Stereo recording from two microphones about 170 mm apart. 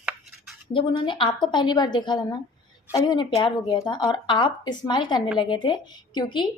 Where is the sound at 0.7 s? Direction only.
30° left (ahead or behind).